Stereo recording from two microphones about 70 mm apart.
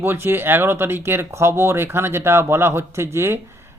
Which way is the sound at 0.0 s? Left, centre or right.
Right.